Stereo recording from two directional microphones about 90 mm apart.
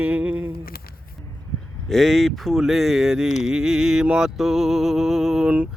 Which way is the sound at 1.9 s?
Centre (ahead or behind).